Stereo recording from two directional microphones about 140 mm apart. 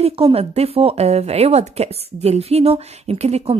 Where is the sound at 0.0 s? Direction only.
45° right (ahead or behind).